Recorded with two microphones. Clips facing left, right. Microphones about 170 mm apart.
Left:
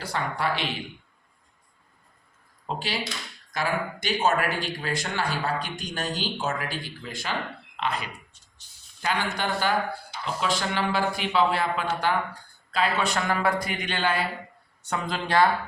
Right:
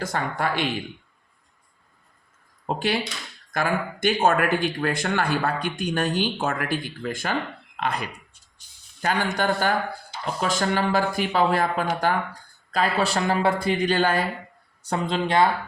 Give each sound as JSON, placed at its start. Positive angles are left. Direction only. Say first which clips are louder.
{"t": 0.0, "sound": "speech", "louder": "right 2 dB", "side_deg": -45}
{"t": 2.6, "sound": "a man's voice", "louder": "right 6 dB", "side_deg": -55}
{"t": 14.8, "sound": "speech", "louder": "right 4 dB", "side_deg": -30}